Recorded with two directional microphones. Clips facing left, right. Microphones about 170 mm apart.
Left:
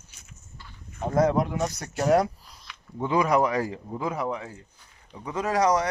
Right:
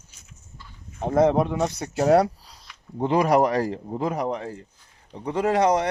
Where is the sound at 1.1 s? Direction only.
25° right (ahead or behind).